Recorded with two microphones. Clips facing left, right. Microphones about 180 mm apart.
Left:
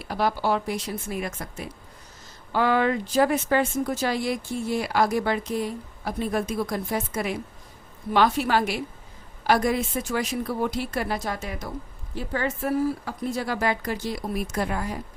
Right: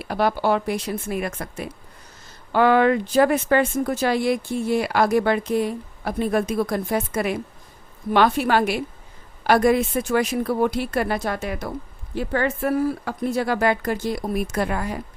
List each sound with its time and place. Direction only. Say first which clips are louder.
0.0 s speech: right 4 dB; 60° right (ahead or behind)